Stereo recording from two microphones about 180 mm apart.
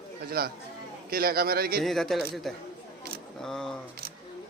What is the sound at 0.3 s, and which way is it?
A man's voice, 55° right (ahead or behind).